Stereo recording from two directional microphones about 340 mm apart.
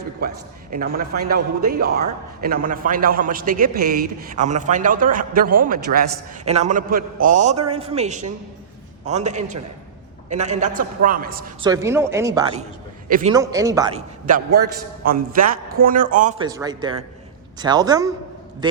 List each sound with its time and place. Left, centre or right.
0.2 s a man's voice: right
11.6 s speech: centre
13.1 s a man's voice: right
13.3 s a man's voice: centre
16.5 s speech: centre